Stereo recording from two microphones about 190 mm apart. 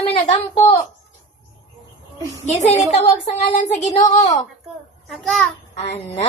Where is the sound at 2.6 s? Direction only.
35° left (ahead or behind).